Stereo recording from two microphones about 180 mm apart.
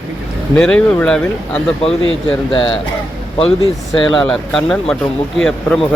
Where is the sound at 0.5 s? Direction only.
5° left (ahead or behind).